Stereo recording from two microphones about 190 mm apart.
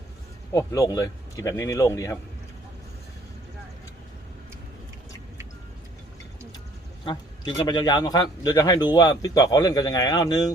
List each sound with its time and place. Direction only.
0.5 s speech: 20° left (ahead or behind)
7.0 s a man's voice: 25° left (ahead or behind)